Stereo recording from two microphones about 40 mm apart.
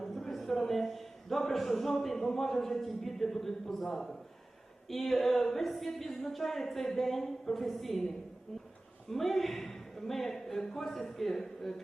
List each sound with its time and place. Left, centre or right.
0.0 s a man's voice: centre
9.0 s speech: centre